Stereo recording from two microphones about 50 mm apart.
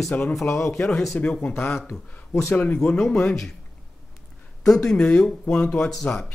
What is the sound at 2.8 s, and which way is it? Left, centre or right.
Speech, centre.